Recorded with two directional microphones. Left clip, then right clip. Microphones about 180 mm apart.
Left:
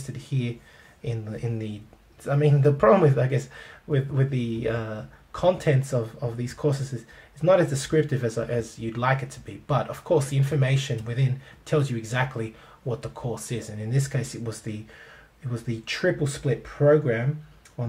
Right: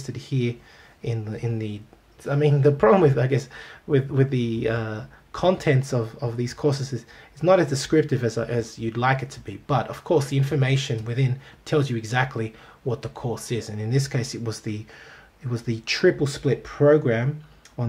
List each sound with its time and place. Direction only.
0.1 s speech: 35° right (ahead or behind)